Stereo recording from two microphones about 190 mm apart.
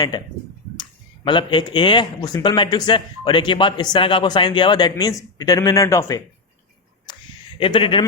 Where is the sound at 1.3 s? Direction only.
25° left (ahead or behind).